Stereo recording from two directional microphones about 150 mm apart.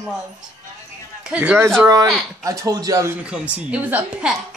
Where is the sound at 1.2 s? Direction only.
10° right (ahead or behind).